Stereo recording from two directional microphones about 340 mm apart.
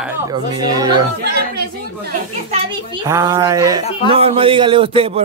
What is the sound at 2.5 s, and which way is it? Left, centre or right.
A woman's voice, centre.